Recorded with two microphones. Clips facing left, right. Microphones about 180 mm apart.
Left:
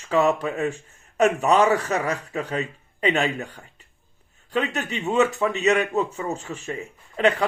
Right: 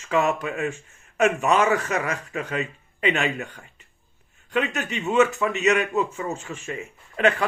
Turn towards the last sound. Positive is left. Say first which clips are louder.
# left 1 dB
turn(degrees=35)  # may be behind; listen again after turning